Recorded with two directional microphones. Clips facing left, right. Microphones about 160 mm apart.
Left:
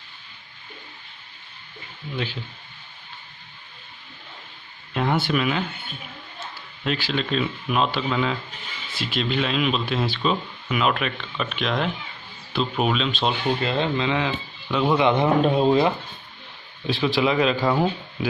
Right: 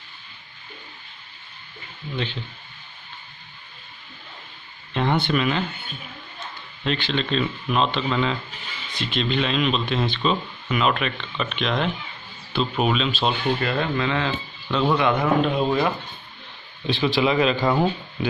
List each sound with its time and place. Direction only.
4.9 s speech: 5° left (ahead or behind)
6.8 s speech: 5° left (ahead or behind)
13.6 s speech: 25° left (ahead or behind)
15.4 s speech: 35° left (ahead or behind)
16.8 s speech: centre (ahead or behind)